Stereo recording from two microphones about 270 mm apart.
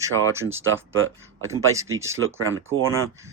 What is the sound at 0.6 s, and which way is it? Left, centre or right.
Speech, right.